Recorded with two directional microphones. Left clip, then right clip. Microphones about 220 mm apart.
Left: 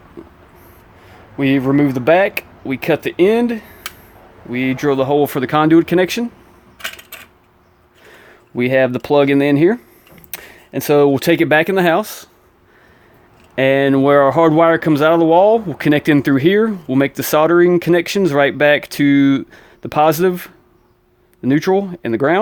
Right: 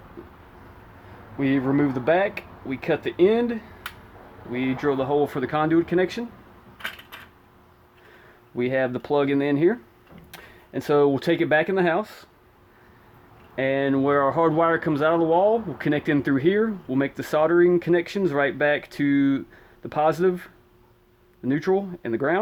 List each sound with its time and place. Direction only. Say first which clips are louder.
1.4 s speech: left 8 dB; 40° left (ahead or behind)
8.1 s speech: left 7 dB; 40° left (ahead or behind)
13.6 s speech: left 10 dB; 45° left (ahead or behind)